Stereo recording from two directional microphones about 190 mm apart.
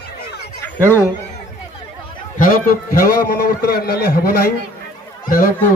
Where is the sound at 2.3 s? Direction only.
50° left (ahead or behind).